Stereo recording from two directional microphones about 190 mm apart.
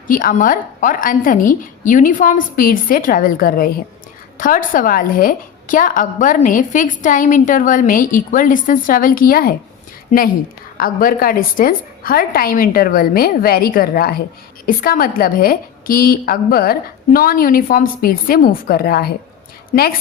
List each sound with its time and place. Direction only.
0.1 s a woman's voice: 45° left (ahead or behind)
19.7 s a woman's voice: 40° left (ahead or behind)